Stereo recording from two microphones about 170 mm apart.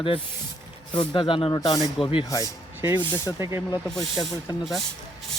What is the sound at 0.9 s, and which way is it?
Speech, 30° left (ahead or behind).